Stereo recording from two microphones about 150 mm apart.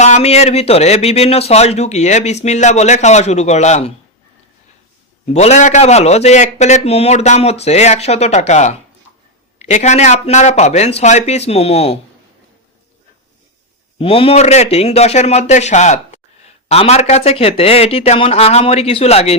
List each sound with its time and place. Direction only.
0.0 s speech: 45° left (ahead or behind)
5.3 s speech: 45° left (ahead or behind)
14.0 s speech: 35° left (ahead or behind)